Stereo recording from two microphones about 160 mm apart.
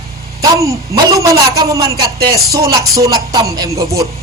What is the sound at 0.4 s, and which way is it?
A man's voice, 20° right (ahead or behind).